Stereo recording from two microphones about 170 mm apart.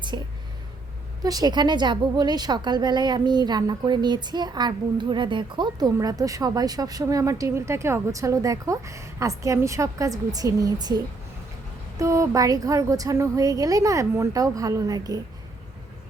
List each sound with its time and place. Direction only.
0.1 s a woman's voice: 25° right (ahead or behind)